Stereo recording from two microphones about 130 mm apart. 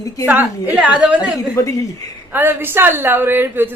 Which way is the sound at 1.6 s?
25° left (ahead or behind).